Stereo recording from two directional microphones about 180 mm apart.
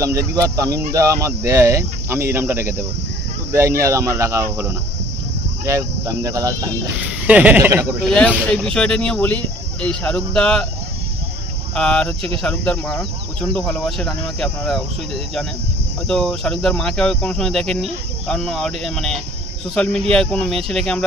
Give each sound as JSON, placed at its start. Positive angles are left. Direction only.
{"t": 0.3, "sound": "speech", "side_deg": -20}
{"t": 7.2, "sound": "speech", "side_deg": -10}
{"t": 8.0, "sound": "speech", "side_deg": 5}
{"t": 11.7, "sound": "speech", "side_deg": 5}
{"t": 16.1, "sound": "speech", "side_deg": 5}